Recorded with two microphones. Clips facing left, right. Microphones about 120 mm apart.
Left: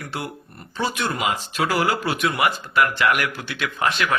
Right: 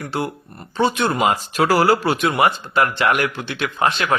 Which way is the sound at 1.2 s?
40° right (ahead or behind).